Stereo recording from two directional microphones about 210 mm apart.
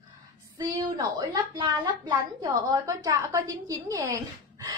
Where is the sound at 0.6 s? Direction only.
15° right (ahead or behind).